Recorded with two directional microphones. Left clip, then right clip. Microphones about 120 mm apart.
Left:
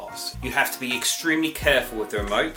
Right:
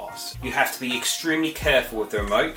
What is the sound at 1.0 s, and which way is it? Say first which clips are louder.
Speech: left 1 dB; 25° left (ahead or behind).